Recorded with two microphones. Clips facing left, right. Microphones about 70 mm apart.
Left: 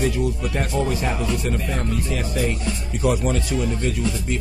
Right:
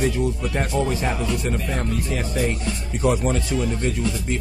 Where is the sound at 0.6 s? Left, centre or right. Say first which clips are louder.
Right 1 dB; right.